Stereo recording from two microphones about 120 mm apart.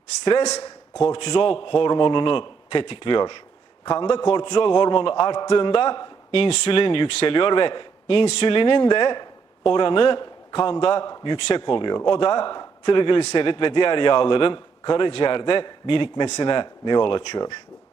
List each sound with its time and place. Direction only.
1.0 s a man's voice: 45° left (ahead or behind)